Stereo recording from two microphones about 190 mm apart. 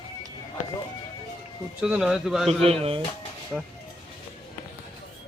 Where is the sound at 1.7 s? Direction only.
5° right (ahead or behind).